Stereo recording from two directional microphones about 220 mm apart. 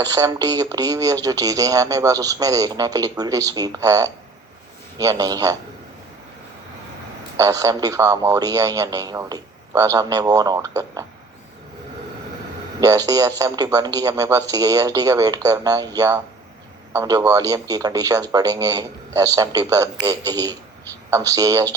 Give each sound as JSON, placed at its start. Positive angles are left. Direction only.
{"t": 0.0, "sound": "speech", "side_deg": -15}
{"t": 7.3, "sound": "speech", "side_deg": -15}
{"t": 12.8, "sound": "speech", "side_deg": -15}